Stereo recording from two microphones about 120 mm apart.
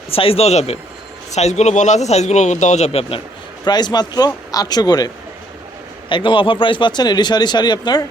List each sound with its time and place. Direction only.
0.1 s speech: 50° left (ahead or behind)
3.6 s speech: 35° left (ahead or behind)
6.1 s speech: 45° left (ahead or behind)